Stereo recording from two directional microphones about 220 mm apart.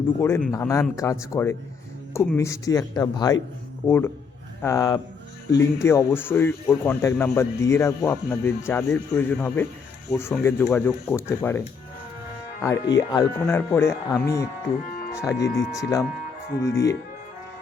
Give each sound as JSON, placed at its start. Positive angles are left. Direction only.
{"t": 0.2, "sound": "a man's voice", "side_deg": 10}
{"t": 12.6, "sound": "a man's voice", "side_deg": 15}